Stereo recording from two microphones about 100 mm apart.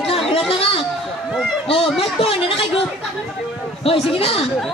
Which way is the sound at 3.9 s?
70° left (ahead or behind).